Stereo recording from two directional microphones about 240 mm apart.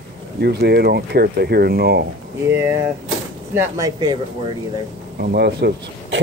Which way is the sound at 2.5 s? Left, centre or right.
Centre.